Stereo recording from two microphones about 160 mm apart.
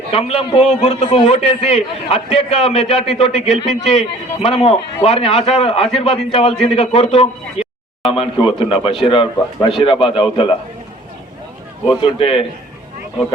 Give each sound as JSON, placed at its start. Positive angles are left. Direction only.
{"t": 0.1, "sound": "a man's voice", "side_deg": 40}
{"t": 7.6, "sound": "a sound", "side_deg": 40}
{"t": 8.1, "sound": "a man's voice", "side_deg": 35}
{"t": 11.9, "sound": "a man's voice", "side_deg": 35}